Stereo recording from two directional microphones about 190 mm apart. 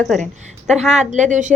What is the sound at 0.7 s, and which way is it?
Speech, 35° right (ahead or behind).